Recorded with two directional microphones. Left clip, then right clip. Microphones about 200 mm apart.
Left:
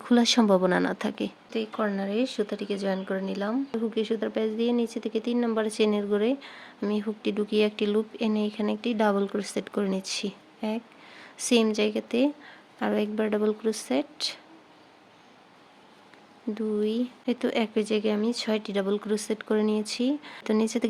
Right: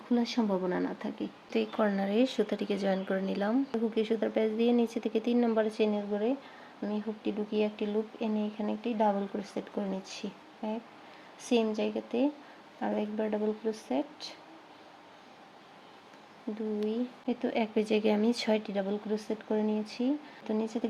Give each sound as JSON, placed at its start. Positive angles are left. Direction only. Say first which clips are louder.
{"t": 0.1, "sound": "speech", "louder": "left 9 dB", "side_deg": 50}
{"t": 1.5, "sound": "a woman's voice", "louder": "right 1 dB", "side_deg": 5}
{"t": 16.9, "sound": "speech", "louder": "left 5 dB", "side_deg": 35}
{"t": 17.7, "sound": "a woman's voice", "louder": "left 2 dB", "side_deg": 15}
{"t": 18.6, "sound": "speech", "louder": "left 6 dB", "side_deg": 30}